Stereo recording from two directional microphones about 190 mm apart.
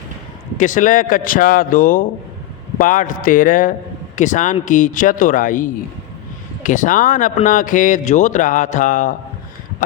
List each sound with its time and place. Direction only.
0.5 s a man's voice: 40° left (ahead or behind)